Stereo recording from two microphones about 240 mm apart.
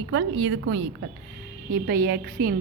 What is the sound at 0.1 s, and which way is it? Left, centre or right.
A woman's voice, right.